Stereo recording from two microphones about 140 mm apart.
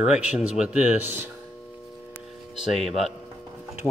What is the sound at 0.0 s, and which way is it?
Speech, 5° right (ahead or behind).